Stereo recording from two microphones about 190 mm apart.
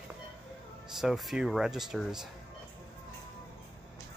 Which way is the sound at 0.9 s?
Centre (ahead or behind).